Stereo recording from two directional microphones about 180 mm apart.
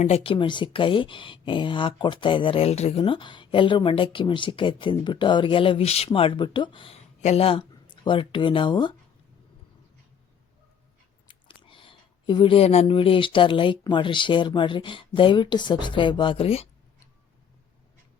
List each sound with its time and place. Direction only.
0.0 s speech: 35° left (ahead or behind)
11.3 s speech: 30° left (ahead or behind)